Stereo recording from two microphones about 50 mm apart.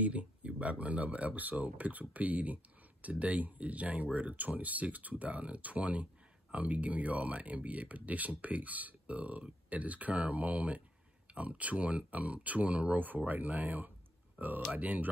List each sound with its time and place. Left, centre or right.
0.0 s speech: right